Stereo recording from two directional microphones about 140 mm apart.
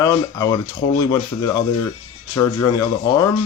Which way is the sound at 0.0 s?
25° left (ahead or behind).